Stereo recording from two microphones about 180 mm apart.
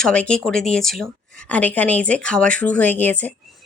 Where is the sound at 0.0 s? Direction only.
5° left (ahead or behind).